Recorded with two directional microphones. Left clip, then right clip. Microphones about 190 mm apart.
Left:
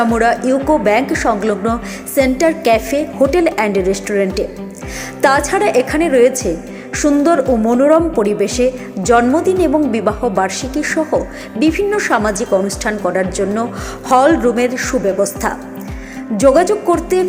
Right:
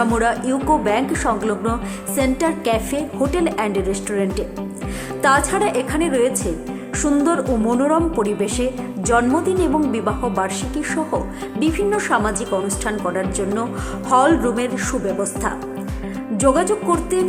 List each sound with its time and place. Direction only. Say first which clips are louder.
0.0 s a woman's voice: left 5 dB; 15° left (ahead or behind)